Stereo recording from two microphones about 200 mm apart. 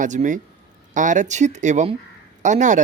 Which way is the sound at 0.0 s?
40° right (ahead or behind).